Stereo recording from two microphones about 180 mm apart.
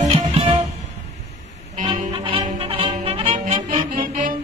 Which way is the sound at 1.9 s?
30° right (ahead or behind).